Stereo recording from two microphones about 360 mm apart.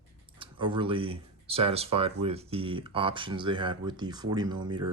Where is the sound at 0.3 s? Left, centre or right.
Centre.